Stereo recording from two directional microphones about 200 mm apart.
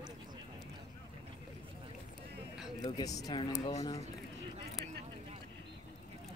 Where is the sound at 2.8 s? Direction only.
20° left (ahead or behind).